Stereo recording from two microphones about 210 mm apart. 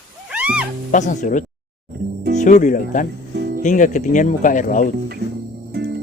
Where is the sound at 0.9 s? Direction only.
35° left (ahead or behind).